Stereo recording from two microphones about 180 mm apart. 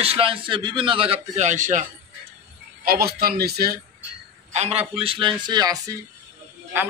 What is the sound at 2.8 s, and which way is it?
A man's voice, 60° right (ahead or behind).